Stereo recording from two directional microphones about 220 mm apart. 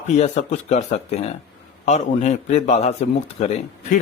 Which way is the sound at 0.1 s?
30° left (ahead or behind).